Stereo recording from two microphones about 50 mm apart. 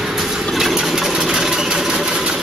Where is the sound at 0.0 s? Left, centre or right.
Centre.